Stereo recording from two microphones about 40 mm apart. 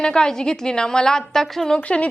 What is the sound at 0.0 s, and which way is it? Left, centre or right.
A woman's voice, centre.